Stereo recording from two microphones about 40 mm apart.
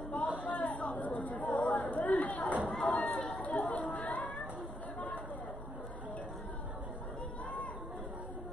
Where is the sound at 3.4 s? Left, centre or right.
Left.